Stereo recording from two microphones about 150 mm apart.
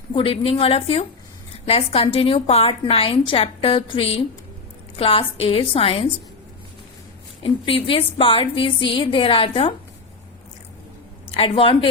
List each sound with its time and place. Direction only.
0.1 s a woman's voice: 35° left (ahead or behind)
7.4 s a woman's voice: 35° left (ahead or behind)
11.3 s a woman's voice: 40° left (ahead or behind)